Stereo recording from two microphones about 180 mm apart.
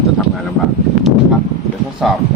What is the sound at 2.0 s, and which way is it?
Speech, centre (ahead or behind).